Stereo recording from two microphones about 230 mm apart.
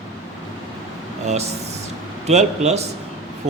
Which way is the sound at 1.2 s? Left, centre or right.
Right.